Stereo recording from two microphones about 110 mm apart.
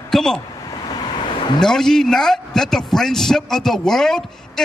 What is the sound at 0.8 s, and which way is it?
Vehicle, 45° left (ahead or behind).